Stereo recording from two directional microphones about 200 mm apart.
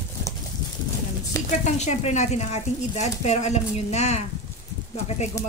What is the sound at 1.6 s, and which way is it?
Speech, 35° left (ahead or behind).